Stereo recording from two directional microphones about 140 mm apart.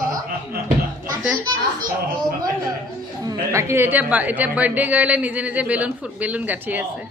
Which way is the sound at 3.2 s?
20° right (ahead or behind).